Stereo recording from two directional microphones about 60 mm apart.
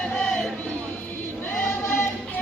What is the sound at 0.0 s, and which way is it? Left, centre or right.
Crowd, centre.